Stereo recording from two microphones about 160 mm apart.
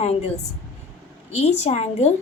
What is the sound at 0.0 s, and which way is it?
Speech, 45° left (ahead or behind).